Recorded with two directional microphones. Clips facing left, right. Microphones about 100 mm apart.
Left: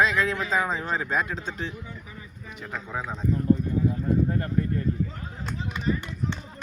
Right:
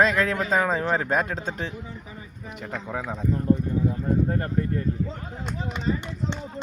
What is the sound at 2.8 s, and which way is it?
Speech, 45° right (ahead or behind).